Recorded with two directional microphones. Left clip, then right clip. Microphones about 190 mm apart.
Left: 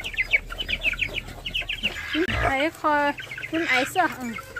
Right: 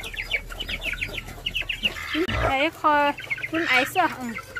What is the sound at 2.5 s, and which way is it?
Speech, 10° left (ahead or behind).